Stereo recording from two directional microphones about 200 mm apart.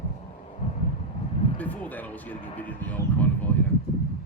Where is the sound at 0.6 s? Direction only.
35° left (ahead or behind).